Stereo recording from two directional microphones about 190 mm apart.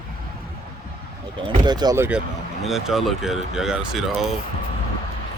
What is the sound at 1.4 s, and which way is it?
Speech, 25° right (ahead or behind).